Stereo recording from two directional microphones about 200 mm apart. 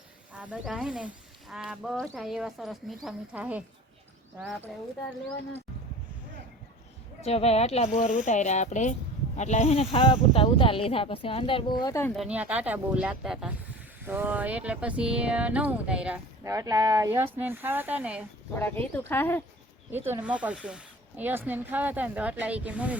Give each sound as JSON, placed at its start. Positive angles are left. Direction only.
{"t": 0.3, "sound": "speech", "side_deg": -5}
{"t": 7.2, "sound": "speech", "side_deg": 30}
{"t": 12.1, "sound": "speech", "side_deg": -5}
{"t": 16.4, "sound": "speech", "side_deg": -15}
{"t": 18.5, "sound": "speech", "side_deg": 10}
{"t": 19.9, "sound": "speech", "side_deg": -10}